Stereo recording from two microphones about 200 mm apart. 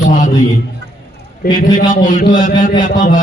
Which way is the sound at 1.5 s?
40° left (ahead or behind).